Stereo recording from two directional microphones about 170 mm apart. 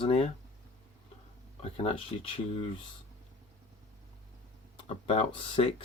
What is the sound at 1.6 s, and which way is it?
Speech, 35° left (ahead or behind).